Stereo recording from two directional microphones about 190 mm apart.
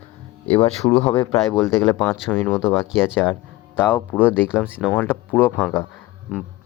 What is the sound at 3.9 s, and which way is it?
Speech, 10° left (ahead or behind).